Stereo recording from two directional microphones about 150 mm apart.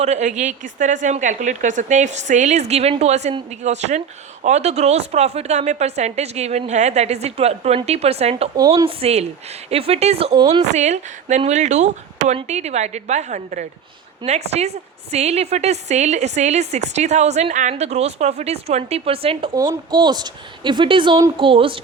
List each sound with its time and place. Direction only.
0.0 s a woman's voice: 50° right (ahead or behind)